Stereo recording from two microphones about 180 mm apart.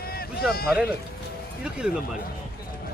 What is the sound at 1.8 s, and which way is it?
Speech, 5° right (ahead or behind).